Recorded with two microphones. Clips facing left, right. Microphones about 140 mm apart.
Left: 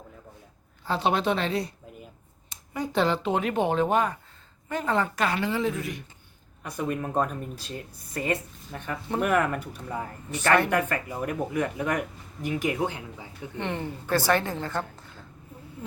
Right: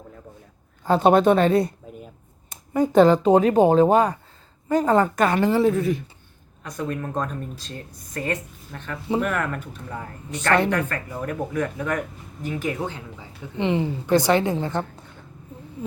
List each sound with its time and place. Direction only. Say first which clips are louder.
0.9 s a woman's voice: right 9 dB; 50° right (ahead or behind)
6.7 s speech: right 1 dB; 10° left (ahead or behind)
13.6 s a woman's voice: right 9 dB; 15° right (ahead or behind)